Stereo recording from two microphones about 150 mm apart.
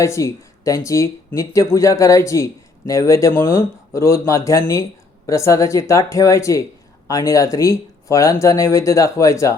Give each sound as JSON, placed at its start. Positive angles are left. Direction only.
{"t": 0.0, "sound": "speech", "side_deg": 20}